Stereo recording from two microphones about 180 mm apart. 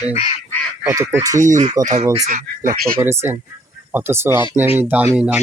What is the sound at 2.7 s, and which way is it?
Speech, 55° right (ahead or behind).